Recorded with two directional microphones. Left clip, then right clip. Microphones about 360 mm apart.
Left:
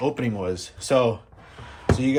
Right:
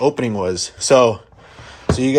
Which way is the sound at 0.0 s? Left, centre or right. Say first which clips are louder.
Right 8 dB; centre.